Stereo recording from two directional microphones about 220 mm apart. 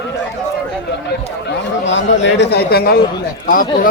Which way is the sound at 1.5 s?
55° left (ahead or behind).